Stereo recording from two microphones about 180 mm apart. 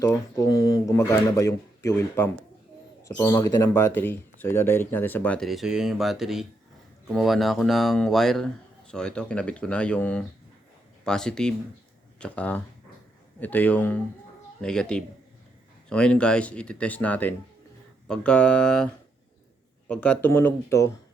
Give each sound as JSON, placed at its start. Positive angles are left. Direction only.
{"t": 0.0, "sound": "speech", "side_deg": 15}
{"t": 19.9, "sound": "speech", "side_deg": 5}